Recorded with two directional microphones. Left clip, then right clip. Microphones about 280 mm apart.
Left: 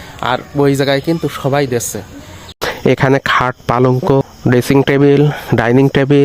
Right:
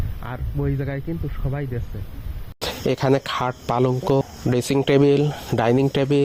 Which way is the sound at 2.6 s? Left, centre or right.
Left.